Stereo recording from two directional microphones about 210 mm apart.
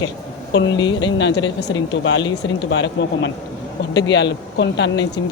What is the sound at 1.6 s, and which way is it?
Speech, 60° left (ahead or behind).